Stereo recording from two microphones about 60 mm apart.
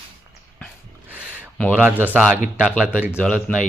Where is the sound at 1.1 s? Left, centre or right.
Right.